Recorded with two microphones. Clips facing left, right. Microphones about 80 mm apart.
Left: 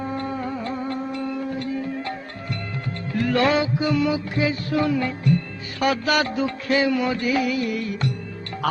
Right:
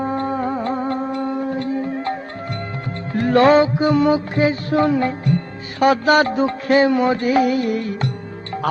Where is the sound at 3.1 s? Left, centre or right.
Right.